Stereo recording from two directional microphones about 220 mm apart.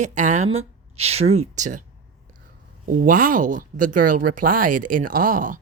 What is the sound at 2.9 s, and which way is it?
A woman's voice, 40° right (ahead or behind).